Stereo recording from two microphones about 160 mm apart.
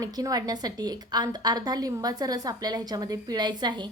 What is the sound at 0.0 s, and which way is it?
A woman's voice, 25° right (ahead or behind).